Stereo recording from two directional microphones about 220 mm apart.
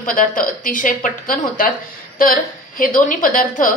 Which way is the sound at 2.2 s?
40° left (ahead or behind).